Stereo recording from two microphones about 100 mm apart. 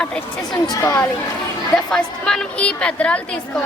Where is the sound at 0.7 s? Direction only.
30° left (ahead or behind).